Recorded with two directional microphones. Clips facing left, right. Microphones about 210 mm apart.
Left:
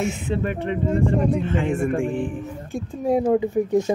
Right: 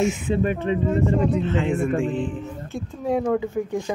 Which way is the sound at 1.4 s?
10° left (ahead or behind).